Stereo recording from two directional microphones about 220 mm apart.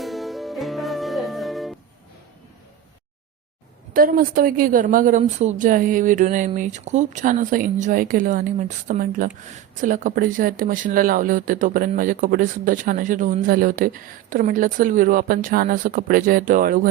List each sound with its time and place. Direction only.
0.0 s music: centre (ahead or behind)
3.9 s speech: 40° right (ahead or behind)